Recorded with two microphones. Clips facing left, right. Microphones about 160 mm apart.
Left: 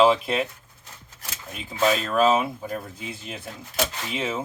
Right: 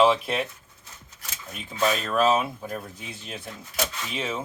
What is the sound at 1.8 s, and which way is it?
Speech, 5° left (ahead or behind).